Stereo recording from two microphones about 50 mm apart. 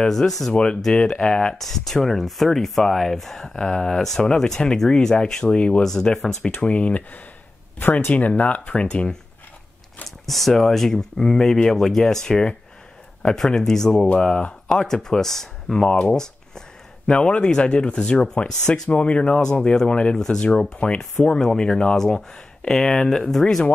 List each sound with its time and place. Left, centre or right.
0.1 s speech: centre
1.6 s speech: centre
6.4 s speech: left
10.0 s speech: centre
18.9 s speech: left